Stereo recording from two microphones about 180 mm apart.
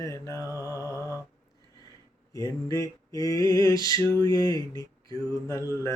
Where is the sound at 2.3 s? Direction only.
20° left (ahead or behind).